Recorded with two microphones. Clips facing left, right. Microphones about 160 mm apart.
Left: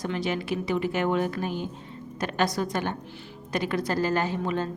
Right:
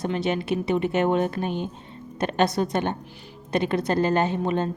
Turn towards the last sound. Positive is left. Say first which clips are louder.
# right 4 dB
turn(degrees=-20)  # may be behind; listen again after turning